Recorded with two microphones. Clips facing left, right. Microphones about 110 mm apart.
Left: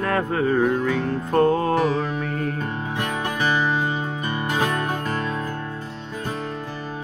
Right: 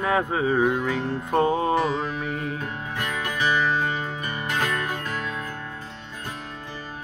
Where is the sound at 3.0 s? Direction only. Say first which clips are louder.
Left 1 dB; 30° left (ahead or behind).